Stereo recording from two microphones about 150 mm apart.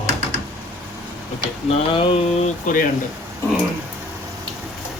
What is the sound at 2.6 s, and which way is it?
Speech, 65° left (ahead or behind).